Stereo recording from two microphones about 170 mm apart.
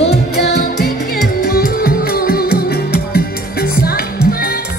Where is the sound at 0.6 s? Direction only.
70° left (ahead or behind).